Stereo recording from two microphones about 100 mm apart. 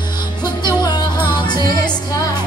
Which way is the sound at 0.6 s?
40° left (ahead or behind).